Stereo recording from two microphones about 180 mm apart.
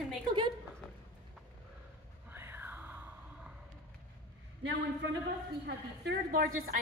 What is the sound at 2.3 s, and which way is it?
Whispering, 10° right (ahead or behind).